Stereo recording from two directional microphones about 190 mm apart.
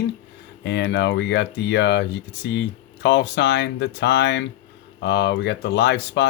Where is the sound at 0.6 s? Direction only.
65° left (ahead or behind).